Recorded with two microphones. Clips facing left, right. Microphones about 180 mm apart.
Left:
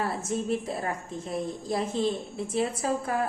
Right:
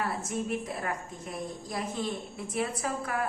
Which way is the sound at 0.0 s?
30° left (ahead or behind).